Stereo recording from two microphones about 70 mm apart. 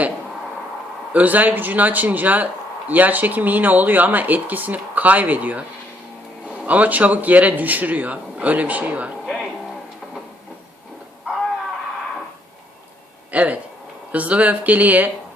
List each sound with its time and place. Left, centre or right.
1.1 s speech: right
9.2 s a sound: centre
13.3 s speech: right